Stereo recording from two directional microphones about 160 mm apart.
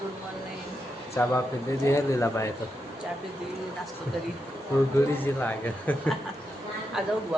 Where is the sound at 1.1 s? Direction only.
15° left (ahead or behind).